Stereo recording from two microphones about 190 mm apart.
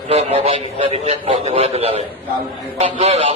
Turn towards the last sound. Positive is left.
turn(degrees=-30)  # may be behind; listen again after turning